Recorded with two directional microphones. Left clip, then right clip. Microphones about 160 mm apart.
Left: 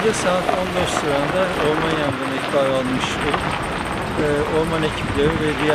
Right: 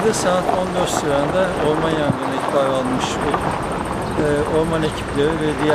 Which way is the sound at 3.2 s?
30° left (ahead or behind).